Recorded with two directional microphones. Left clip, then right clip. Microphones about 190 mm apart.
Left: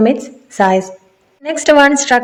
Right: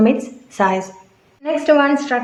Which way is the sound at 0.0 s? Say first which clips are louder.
Left 3 dB; 20° left (ahead or behind).